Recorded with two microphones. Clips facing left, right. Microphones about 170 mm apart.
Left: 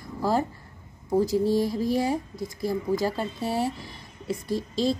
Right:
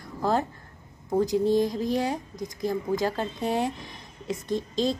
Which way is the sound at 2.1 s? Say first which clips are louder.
Left 3 dB; 15° right (ahead or behind).